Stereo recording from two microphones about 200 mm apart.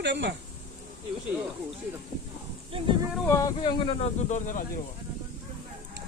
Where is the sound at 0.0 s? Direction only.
60° right (ahead or behind).